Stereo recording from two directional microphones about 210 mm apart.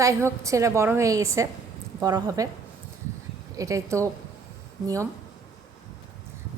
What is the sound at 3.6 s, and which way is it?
Speech, 15° right (ahead or behind).